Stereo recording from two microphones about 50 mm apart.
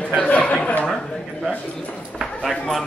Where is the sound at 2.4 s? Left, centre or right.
Centre.